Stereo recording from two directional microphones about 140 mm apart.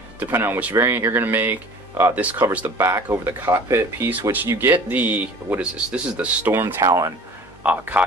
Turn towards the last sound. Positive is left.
turn(degrees=-15)  # may be behind; listen again after turning